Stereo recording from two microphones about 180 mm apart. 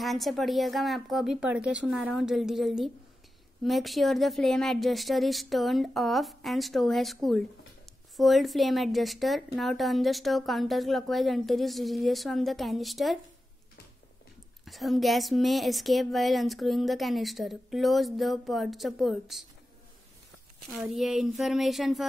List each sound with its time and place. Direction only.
0.0 s speech: centre (ahead or behind)
14.6 s speech: centre (ahead or behind)
20.7 s speech: centre (ahead or behind)